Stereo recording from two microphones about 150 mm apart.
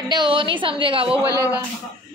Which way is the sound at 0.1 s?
30° right (ahead or behind).